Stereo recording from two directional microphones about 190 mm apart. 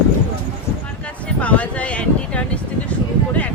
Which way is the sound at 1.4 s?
5° left (ahead or behind).